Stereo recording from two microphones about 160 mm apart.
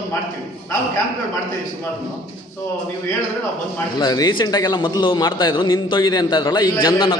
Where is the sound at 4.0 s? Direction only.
25° left (ahead or behind).